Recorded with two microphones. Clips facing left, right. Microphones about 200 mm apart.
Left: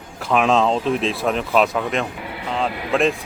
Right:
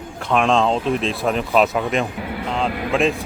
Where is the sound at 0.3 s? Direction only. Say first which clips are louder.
Even; 5° left (ahead or behind).